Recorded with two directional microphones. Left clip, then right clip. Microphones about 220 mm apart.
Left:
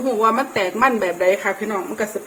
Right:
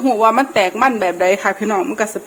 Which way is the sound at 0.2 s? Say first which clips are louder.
Right 5 dB; 45° right (ahead or behind).